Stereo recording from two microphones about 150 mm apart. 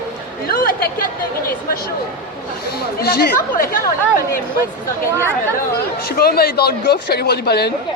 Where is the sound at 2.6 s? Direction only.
90° left.